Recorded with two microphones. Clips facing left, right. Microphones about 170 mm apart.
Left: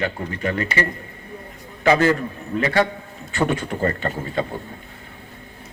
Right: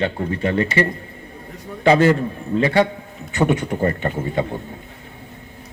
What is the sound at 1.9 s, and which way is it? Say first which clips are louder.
A man's voice: right 3 dB; 25° right (ahead or behind).